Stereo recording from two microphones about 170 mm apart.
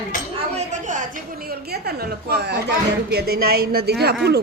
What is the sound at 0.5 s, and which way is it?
Speech, 45° right (ahead or behind).